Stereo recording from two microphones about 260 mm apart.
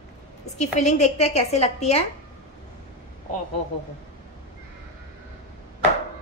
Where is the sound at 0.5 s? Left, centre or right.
Left.